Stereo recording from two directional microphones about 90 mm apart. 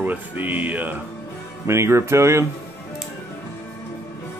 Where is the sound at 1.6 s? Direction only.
30° right (ahead or behind).